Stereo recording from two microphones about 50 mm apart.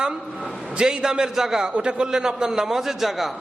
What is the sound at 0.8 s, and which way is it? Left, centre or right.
A man's voice, centre.